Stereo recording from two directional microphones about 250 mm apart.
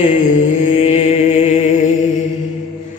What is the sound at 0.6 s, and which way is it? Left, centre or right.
Mantra, left.